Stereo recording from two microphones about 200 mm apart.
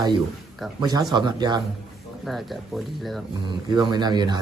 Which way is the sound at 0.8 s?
20° right (ahead or behind).